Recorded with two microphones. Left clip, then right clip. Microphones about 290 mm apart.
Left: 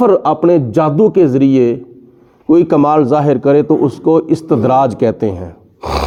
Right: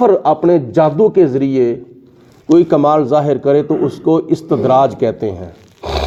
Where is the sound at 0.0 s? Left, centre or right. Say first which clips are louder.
Even; left.